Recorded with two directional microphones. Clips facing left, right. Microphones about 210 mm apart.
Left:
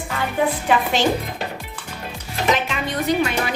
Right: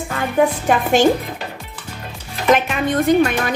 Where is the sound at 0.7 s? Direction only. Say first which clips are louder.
Right 2 dB; 45° right (ahead or behind).